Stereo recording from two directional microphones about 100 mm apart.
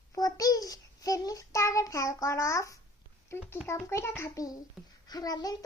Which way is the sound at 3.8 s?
30° left (ahead or behind).